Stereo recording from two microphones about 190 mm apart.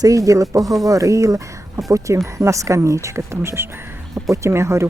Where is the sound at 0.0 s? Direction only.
15° right (ahead or behind).